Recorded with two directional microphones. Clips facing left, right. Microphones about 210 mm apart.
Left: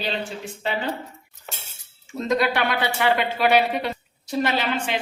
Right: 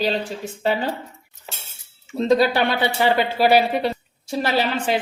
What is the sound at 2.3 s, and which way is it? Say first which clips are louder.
Speech: right 4 dB; 30° right (ahead or behind).